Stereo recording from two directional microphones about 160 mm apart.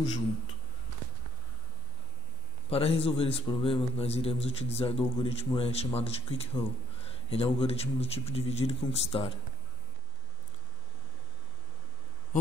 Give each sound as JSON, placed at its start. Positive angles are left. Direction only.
{"t": 0.0, "sound": "speech", "side_deg": 25}
{"t": 2.7, "sound": "a man's voice", "side_deg": 35}